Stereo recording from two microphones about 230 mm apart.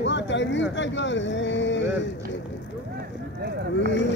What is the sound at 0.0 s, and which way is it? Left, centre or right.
Speech, left.